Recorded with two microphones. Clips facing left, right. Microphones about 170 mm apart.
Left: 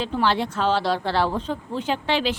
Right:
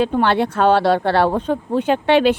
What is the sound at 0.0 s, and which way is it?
Speech, 60° right (ahead or behind).